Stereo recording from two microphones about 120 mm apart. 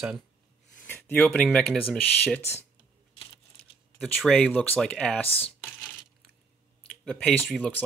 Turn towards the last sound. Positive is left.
turn(degrees=10)  # may be behind; listen again after turning